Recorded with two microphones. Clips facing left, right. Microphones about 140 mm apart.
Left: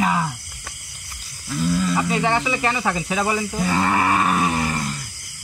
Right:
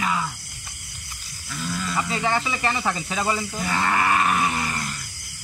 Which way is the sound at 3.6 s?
30° left (ahead or behind).